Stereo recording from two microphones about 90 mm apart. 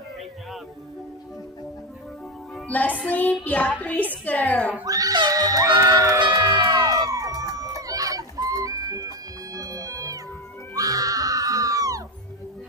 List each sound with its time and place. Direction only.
2.7 s a woman's voice: 20° left (ahead or behind)
4.8 s a sound: 40° right (ahead or behind)
6.4 s crowd: 50° right (ahead or behind)
10.7 s music: 40° right (ahead or behind)